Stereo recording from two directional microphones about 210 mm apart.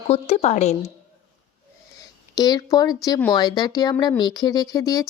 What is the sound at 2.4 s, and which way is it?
Speech, 20° left (ahead or behind).